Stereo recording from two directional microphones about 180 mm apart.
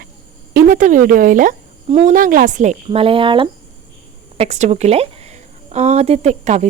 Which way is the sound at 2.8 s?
30° right (ahead or behind).